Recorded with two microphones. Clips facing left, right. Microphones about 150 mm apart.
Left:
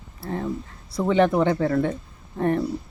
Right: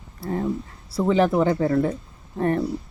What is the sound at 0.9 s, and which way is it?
Speech, 5° right (ahead or behind).